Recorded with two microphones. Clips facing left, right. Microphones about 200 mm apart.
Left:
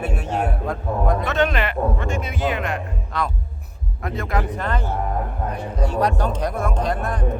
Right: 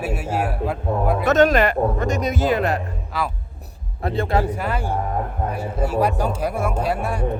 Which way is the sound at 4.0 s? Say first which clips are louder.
Right 4 dB; 30° right (ahead or behind).